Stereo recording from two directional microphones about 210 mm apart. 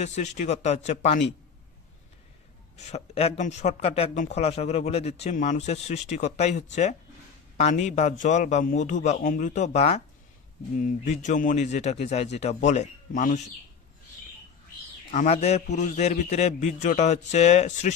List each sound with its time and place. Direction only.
0.0 s speech: 35° left (ahead or behind)
2.9 s speech: 30° left (ahead or behind)
15.0 s speech: 30° left (ahead or behind)